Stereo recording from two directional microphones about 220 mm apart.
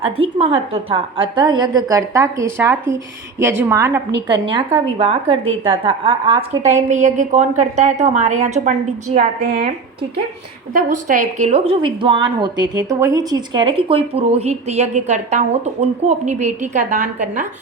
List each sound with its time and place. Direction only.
0.0 s a woman's voice: 25° right (ahead or behind)
10.8 s speech: 35° right (ahead or behind)